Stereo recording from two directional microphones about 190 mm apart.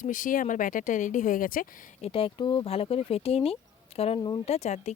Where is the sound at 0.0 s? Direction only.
45° left (ahead or behind).